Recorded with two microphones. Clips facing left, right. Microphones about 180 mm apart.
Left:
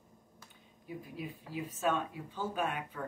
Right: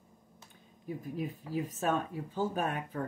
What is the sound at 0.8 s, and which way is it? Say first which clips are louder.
Speech: right 5 dB; 45° right (ahead or behind).